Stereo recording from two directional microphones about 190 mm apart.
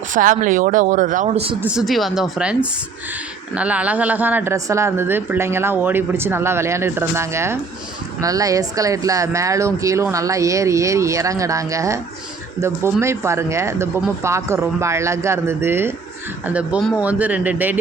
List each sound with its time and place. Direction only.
0.1 s speech: 45° right (ahead or behind)
1.6 s speech: centre (ahead or behind)